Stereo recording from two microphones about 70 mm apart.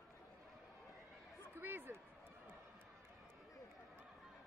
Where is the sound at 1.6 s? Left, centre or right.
Right.